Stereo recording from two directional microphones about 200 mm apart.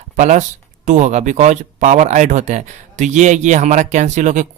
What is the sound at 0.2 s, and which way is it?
Speech, 40° right (ahead or behind).